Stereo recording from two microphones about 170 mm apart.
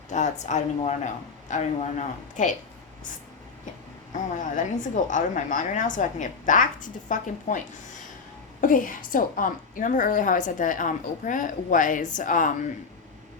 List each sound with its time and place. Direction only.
0.1 s a woman's voice: 45° left (ahead or behind)
4.1 s a woman's voice: 50° left (ahead or behind)
8.6 s a woman's voice: 55° left (ahead or behind)